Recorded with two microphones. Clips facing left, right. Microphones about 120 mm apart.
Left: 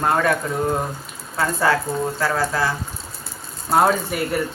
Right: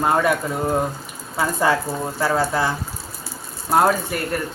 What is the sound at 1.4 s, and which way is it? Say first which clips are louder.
Speech: even; 15° right (ahead or behind).